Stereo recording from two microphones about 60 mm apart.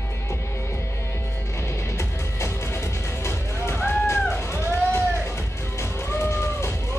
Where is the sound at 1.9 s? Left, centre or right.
Left.